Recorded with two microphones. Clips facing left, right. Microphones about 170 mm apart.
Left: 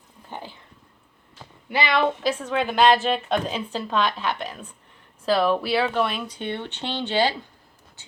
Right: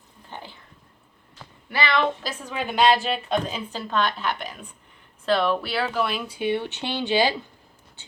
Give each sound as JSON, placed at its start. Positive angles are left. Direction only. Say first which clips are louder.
{"t": 0.3, "sound": "a sound", "louder": "left 3 dB", "side_deg": 15}
{"t": 1.7, "sound": "speech", "louder": "left 1 dB", "side_deg": 15}
{"t": 2.4, "sound": "speech", "louder": "right 1 dB", "side_deg": -5}
{"t": 2.8, "sound": "speech", "louder": "left 1 dB", "side_deg": 45}
{"t": 3.1, "sound": "speech", "louder": "left 2 dB", "side_deg": 0}